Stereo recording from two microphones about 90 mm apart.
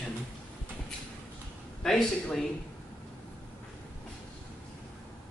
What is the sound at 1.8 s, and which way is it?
Speech, 5° left (ahead or behind).